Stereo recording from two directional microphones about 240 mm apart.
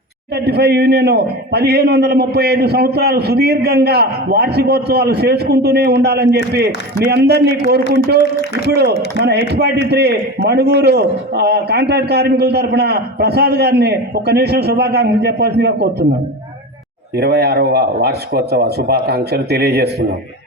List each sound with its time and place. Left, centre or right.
0.4 s a man's voice: right
8.7 s a man's voice: right
17.2 s speech: right